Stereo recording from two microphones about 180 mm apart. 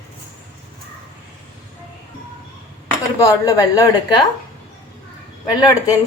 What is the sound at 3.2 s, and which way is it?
A woman's voice, 20° left (ahead or behind).